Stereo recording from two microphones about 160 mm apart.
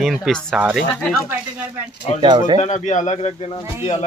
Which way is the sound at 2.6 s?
50° left (ahead or behind).